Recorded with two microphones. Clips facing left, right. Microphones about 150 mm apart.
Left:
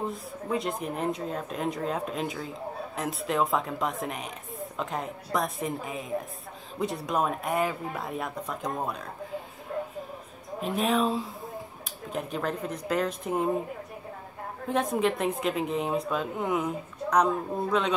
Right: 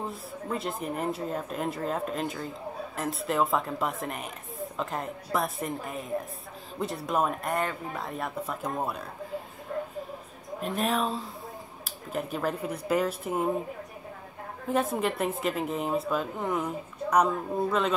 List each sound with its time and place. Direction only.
0.1 s speech: centre (ahead or behind)
10.6 s speech: centre (ahead or behind)
14.7 s speech: 5° right (ahead or behind)